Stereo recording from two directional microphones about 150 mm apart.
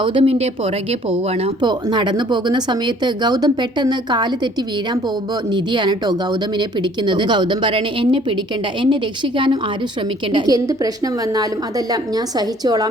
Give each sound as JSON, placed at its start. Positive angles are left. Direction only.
{"t": 0.0, "sound": "speech", "side_deg": -35}
{"t": 1.6, "sound": "speech", "side_deg": -30}
{"t": 5.5, "sound": "speech", "side_deg": -30}